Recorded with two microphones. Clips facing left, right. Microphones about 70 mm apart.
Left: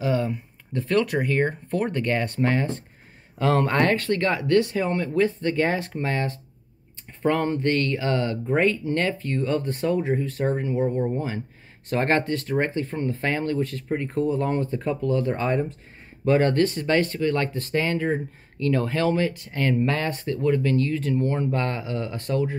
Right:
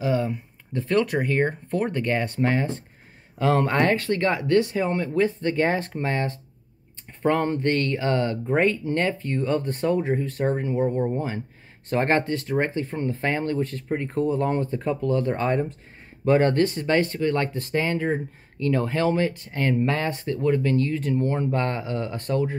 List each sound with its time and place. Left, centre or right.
0.0 s speech: centre; by 15.6 s right
16.3 s speech: right